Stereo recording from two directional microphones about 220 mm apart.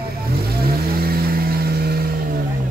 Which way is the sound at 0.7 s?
45° right (ahead or behind).